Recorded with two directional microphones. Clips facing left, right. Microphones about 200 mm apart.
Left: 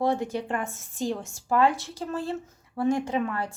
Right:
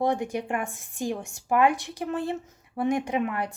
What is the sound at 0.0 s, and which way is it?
A woman's voice, 15° right (ahead or behind).